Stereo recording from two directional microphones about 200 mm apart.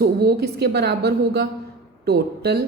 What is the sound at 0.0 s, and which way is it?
A woman's voice, 55° right (ahead or behind).